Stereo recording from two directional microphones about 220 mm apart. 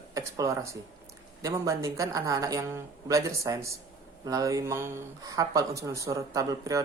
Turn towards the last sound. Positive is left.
turn(degrees=-15)  # may be behind; listen again after turning